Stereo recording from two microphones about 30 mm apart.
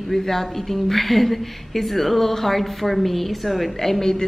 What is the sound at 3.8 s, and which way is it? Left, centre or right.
Speech, centre.